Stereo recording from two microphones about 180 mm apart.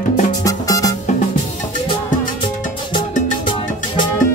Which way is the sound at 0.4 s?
20° left (ahead or behind).